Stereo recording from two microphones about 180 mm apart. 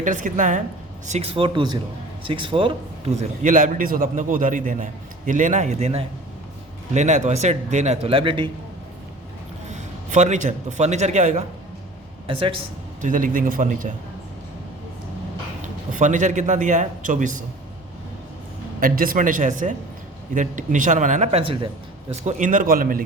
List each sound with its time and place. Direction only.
0.0 s a man's voice: 45° right (ahead or behind); by 8.4 s 30° right (ahead or behind)
9.7 s a man's voice: 40° right (ahead or behind)
13.0 s a man's voice: 45° right (ahead or behind)
15.9 s a man's voice: 45° right (ahead or behind)
18.8 s a man's voice: 50° right (ahead or behind)